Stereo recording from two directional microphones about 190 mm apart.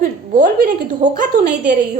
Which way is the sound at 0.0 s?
45° right (ahead or behind).